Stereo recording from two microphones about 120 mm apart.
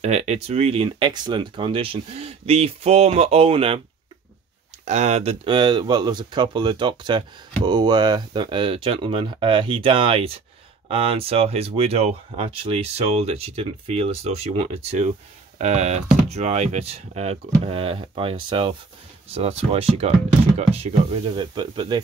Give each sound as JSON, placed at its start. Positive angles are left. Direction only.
{"t": 0.0, "sound": "speech", "side_deg": -65}
{"t": 4.8, "sound": "speech", "side_deg": -70}
{"t": 19.3, "sound": "speech", "side_deg": -60}
{"t": 21.4, "sound": "speech", "side_deg": -40}